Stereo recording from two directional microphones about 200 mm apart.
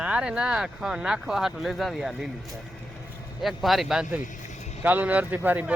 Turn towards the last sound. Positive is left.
turn(degrees=-10)  # may be behind; listen again after turning